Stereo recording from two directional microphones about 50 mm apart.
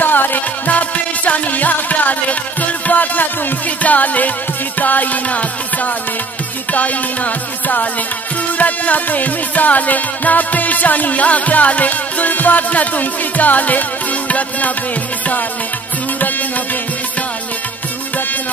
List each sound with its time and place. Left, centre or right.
0.0 s music: left
6.7 s music: left